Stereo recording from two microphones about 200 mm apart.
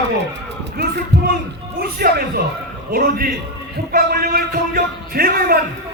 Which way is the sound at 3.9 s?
50° right (ahead or behind).